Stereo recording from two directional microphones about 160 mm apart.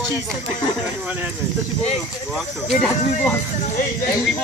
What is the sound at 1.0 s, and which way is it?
Speech, 10° right (ahead or behind).